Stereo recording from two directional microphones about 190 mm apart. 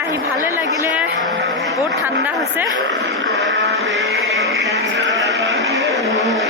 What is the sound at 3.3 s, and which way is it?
Music, 65° right (ahead or behind).